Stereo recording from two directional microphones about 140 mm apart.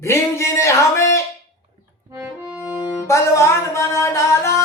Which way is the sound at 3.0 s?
20° left (ahead or behind).